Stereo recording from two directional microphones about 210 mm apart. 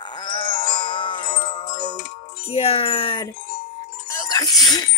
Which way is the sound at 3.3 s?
45° left (ahead or behind).